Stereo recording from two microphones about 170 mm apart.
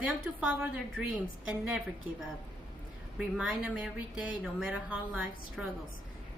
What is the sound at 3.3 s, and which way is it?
Speech, 5° right (ahead or behind).